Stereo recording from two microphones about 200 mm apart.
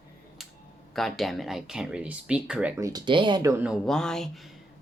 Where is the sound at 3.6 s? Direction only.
Centre (ahead or behind).